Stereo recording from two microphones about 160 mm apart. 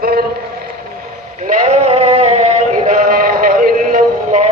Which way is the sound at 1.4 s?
45° right (ahead or behind).